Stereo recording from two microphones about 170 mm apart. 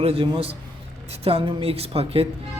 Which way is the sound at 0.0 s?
35° right (ahead or behind).